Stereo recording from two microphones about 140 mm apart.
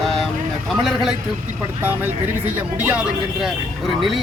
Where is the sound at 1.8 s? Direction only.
15° right (ahead or behind).